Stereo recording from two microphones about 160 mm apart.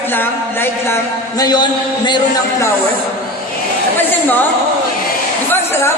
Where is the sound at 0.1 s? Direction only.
15° left (ahead or behind).